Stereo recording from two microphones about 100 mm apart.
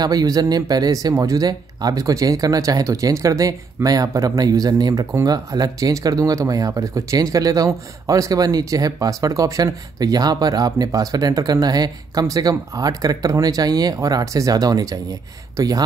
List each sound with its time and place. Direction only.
0.0 s speech: 40° right (ahead or behind)